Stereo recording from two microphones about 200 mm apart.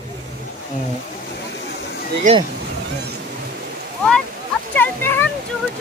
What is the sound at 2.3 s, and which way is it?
Speech, 40° right (ahead or behind).